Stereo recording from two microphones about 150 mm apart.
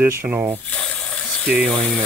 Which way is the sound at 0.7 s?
10° left (ahead or behind).